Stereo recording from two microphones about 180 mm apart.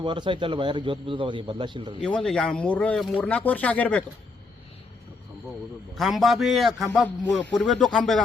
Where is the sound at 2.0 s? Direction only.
5° left (ahead or behind).